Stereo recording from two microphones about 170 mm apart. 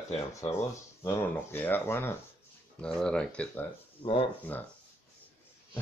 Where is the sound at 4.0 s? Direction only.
30° left (ahead or behind).